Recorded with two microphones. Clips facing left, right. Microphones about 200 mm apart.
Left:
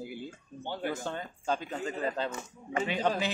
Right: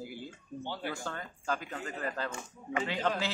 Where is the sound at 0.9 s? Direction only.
20° left (ahead or behind).